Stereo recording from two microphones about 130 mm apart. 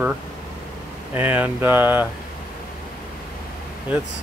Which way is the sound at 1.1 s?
15° right (ahead or behind).